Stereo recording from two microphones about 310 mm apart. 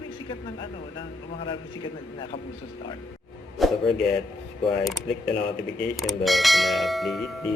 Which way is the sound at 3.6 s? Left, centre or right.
Centre.